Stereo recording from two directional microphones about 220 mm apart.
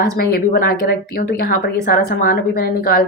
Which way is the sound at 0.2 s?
40° left (ahead or behind).